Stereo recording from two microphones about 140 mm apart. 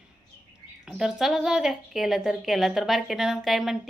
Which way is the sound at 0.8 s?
5° right (ahead or behind).